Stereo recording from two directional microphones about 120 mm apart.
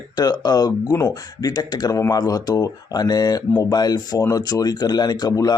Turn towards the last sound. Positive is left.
turn(degrees=35)  # may be behind; listen again after turning